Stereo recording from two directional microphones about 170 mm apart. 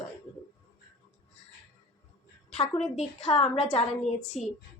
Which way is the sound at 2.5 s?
40° left (ahead or behind).